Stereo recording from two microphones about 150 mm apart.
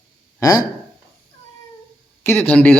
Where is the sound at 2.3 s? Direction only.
10° left (ahead or behind).